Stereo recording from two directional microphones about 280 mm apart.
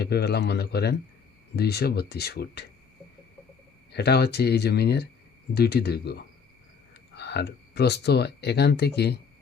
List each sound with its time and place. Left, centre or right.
0.0 s speech: left
3.9 s speech: left
7.2 s speech: left